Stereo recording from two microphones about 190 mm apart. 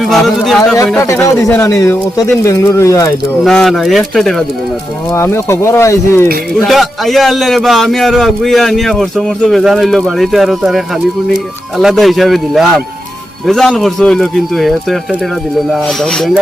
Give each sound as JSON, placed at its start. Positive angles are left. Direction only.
{"t": 0.0, "sound": "speech", "side_deg": 0}
{"t": 0.9, "sound": "speech", "side_deg": 15}
{"t": 3.4, "sound": "a man's voice", "side_deg": 0}
{"t": 5.1, "sound": "speech", "side_deg": 15}
{"t": 6.5, "sound": "a man's voice", "side_deg": 0}